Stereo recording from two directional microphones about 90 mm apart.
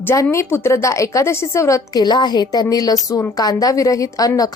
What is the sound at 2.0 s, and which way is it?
A woman's voice, 50° left (ahead or behind).